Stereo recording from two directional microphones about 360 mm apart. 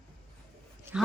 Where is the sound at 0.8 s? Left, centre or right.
Centre.